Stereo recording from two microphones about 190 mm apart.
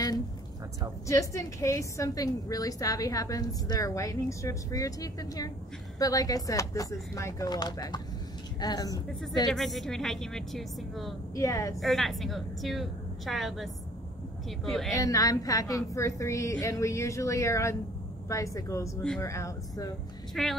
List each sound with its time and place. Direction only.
1.0 s a woman's voice: 15° left (ahead or behind)
9.5 s a woman's voice: centre (ahead or behind)
11.3 s a woman's voice: 15° left (ahead or behind)
11.8 s a woman's voice: centre (ahead or behind)
15.0 s a woman's voice: 20° left (ahead or behind)
20.4 s a woman's voice: centre (ahead or behind)